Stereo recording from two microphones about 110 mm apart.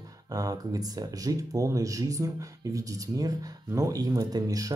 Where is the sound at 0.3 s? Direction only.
35° right (ahead or behind).